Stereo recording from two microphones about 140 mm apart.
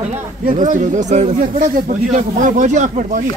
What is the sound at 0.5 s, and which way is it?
Speech, 65° right (ahead or behind).